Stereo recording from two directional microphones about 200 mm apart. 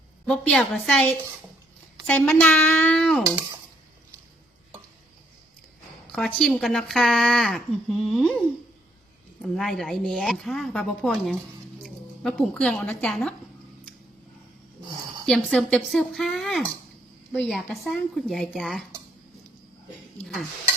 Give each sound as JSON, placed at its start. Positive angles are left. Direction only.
{"t": 0.3, "sound": "speech", "side_deg": 5}
{"t": 6.1, "sound": "speech", "side_deg": 0}
{"t": 15.3, "sound": "speech", "side_deg": 5}